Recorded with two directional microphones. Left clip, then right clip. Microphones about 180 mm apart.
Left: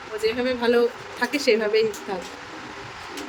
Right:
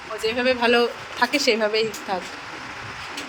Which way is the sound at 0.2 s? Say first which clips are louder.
Right 3 dB; 5° left (ahead or behind).